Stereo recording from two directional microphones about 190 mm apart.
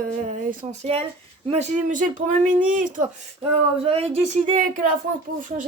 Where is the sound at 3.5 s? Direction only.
30° right (ahead or behind).